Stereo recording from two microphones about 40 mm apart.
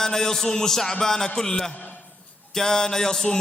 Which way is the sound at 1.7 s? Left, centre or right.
Left.